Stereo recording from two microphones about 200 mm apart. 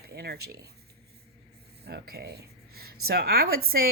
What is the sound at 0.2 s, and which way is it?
Speech, 55° right (ahead or behind).